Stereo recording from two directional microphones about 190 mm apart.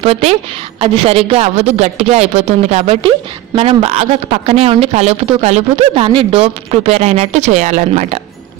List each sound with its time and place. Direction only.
0.0 s speech: 30° right (ahead or behind)